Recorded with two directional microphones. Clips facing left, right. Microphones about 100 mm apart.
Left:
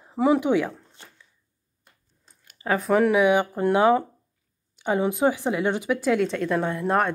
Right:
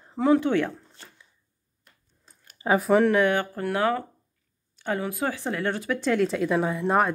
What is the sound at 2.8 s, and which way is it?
Speech, 5° left (ahead or behind).